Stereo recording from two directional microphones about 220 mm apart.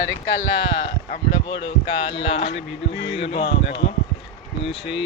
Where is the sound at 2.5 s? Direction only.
55° left (ahead or behind).